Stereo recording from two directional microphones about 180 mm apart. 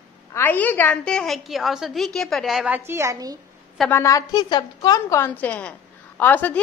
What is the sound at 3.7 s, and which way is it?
A woman's voice, 10° left (ahead or behind).